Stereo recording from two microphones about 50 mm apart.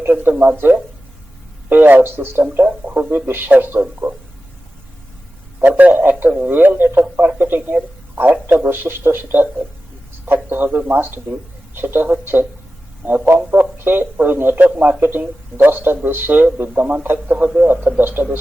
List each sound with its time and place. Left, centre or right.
0.0 s a man's voice: right
1.7 s a man's voice: right
2.6 s speech: right
3.1 s speech: right
5.5 s a man's voice: right
14.6 s a man's voice: right